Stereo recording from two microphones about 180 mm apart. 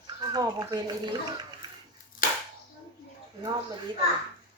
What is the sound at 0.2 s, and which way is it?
Speech, 20° right (ahead or behind).